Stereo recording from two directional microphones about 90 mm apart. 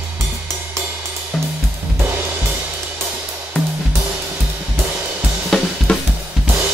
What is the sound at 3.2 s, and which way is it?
Music, 25° right (ahead or behind).